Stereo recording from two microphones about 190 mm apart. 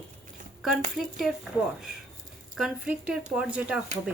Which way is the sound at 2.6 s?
5° right (ahead or behind).